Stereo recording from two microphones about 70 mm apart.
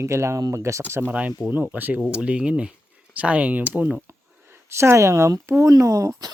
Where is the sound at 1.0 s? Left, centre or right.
Right.